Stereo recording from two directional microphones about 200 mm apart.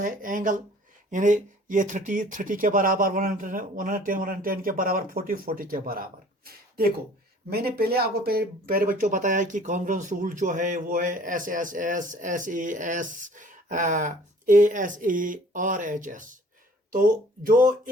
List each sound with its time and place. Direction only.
0.0 s speech: 40° right (ahead or behind)